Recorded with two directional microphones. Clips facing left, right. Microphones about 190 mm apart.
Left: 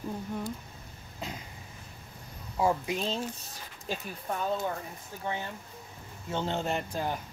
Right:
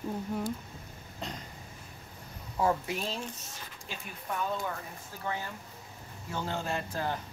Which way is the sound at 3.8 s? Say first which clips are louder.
Left 7 dB; 40° left (ahead or behind).